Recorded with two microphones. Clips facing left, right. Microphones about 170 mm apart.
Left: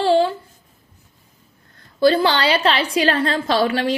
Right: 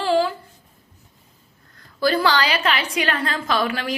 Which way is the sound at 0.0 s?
25° left (ahead or behind).